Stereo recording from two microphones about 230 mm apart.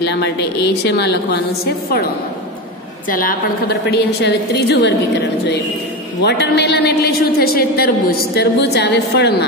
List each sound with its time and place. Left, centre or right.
0.0 s a woman's voice: left
3.1 s a woman's voice: left
6.2 s a woman's voice: left